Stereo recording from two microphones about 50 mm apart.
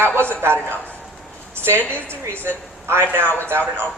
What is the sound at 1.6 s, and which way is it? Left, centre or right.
A woman's voice, right.